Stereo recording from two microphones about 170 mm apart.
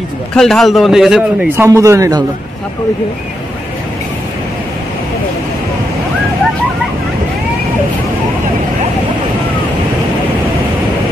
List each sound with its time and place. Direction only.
0.3 s a man's voice: centre (ahead or behind)
1.6 s speech: 20° right (ahead or behind)